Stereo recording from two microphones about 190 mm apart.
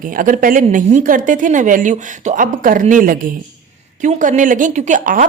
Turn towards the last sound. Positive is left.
turn(degrees=-40)  # may be behind; listen again after turning